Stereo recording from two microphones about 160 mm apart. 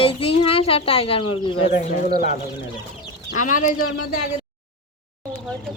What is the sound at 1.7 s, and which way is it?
Speech, 55° left (ahead or behind).